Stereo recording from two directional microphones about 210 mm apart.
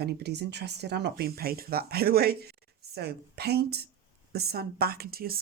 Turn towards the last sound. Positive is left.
turn(degrees=-45)  # may be behind; listen again after turning